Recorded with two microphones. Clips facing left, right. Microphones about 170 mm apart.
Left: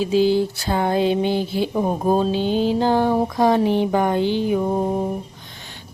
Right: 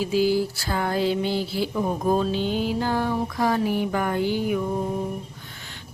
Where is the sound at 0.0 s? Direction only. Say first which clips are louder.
Left 4 dB; 20° left (ahead or behind).